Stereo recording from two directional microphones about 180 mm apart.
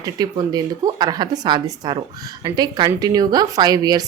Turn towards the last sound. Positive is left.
turn(degrees=-20)  # may be behind; listen again after turning